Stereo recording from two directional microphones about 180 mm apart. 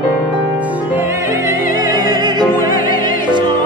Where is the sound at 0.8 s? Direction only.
10° right (ahead or behind).